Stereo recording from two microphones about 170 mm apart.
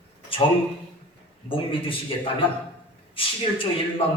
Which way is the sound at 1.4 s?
30° left (ahead or behind).